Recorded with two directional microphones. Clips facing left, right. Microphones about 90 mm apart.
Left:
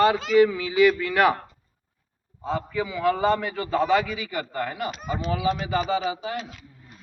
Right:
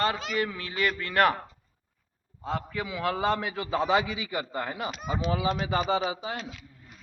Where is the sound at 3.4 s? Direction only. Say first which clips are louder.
Left 3 dB; 10° right (ahead or behind).